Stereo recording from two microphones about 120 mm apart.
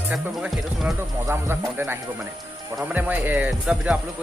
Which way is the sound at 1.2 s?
20° right (ahead or behind).